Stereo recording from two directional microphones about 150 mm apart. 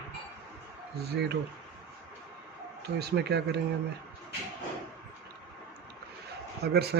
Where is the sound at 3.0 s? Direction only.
90° right.